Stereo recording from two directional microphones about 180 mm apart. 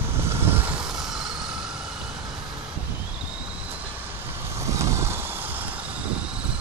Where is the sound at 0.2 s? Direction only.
15° right (ahead or behind).